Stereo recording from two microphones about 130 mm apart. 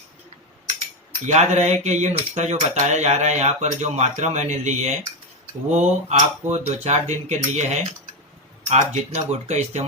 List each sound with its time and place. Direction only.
1.3 s speech: 60° right (ahead or behind)